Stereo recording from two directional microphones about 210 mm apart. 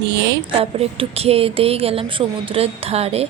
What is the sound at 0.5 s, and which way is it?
A woman's voice, 25° right (ahead or behind).